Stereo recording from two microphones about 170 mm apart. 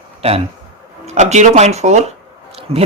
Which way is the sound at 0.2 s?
35° right (ahead or behind).